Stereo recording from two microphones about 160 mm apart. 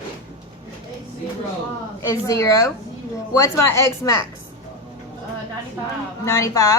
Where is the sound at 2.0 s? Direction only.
20° left (ahead or behind).